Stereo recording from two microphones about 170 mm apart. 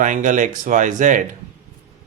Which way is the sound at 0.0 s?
45° right (ahead or behind).